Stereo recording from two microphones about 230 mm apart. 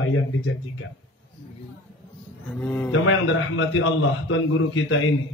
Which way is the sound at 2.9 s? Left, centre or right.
Left.